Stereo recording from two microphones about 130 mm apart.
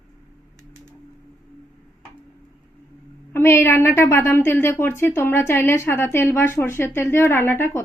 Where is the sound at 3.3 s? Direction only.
20° left (ahead or behind).